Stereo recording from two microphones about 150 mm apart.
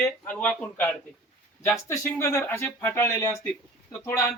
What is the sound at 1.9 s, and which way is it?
Speech, 20° left (ahead or behind).